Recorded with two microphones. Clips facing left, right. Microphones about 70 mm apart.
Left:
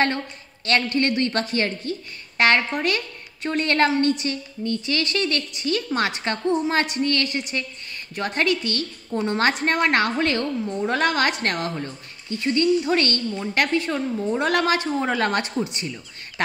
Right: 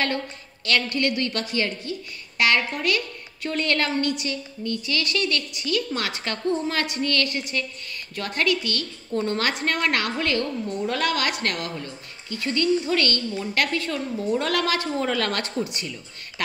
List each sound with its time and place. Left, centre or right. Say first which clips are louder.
0.7 s a woman's voice: left 2 dB; left